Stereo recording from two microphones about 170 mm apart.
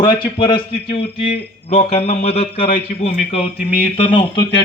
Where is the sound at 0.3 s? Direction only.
25° left (ahead or behind); by 3.1 s 45° left (ahead or behind).